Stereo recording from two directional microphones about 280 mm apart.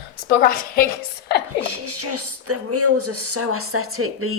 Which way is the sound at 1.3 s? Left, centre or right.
Left.